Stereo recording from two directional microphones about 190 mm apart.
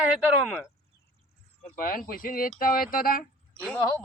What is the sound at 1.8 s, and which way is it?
A man's voice, 50° left (ahead or behind).